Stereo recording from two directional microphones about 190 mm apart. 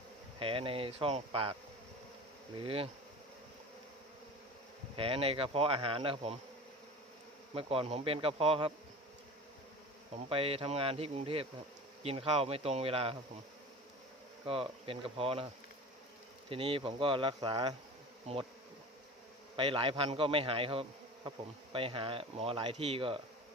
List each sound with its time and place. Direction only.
0.3 s insect: 30° right (ahead or behind)
2.6 s insect: 30° right (ahead or behind)
4.9 s insect: 30° right (ahead or behind)
7.5 s insect: 30° right (ahead or behind)
10.2 s speech: 30° right (ahead or behind)
14.4 s insect: 30° right (ahead or behind)
16.5 s insect: 25° right (ahead or behind)
18.3 s speech: 35° right (ahead or behind)
19.5 s insect: 25° right (ahead or behind)